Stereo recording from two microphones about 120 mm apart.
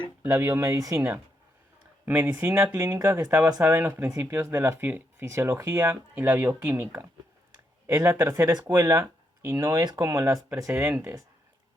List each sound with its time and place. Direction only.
0.3 s speech: 20° right (ahead or behind)
2.0 s speech: 15° right (ahead or behind)